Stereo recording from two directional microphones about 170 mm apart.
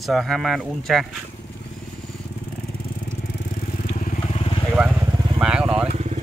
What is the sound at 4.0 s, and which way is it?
Vehicle, 40° left (ahead or behind).